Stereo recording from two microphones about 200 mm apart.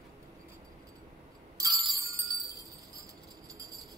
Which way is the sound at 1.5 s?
15° right (ahead or behind).